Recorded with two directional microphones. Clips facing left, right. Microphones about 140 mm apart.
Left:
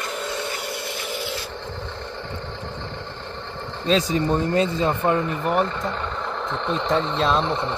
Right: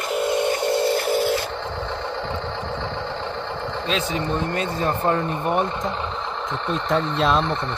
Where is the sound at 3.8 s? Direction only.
40° left (ahead or behind).